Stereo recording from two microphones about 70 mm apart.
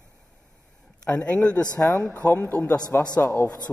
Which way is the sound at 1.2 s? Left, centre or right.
Centre.